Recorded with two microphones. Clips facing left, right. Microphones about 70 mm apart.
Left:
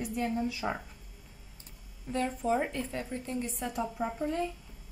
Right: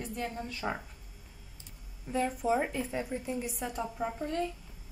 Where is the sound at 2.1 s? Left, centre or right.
Centre.